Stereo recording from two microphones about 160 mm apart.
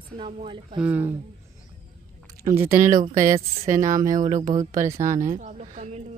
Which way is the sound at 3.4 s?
50° right (ahead or behind).